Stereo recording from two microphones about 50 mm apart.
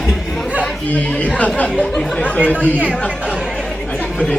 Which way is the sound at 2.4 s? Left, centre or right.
Left.